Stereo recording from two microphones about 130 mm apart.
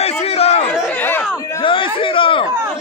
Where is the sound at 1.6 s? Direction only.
40° left (ahead or behind).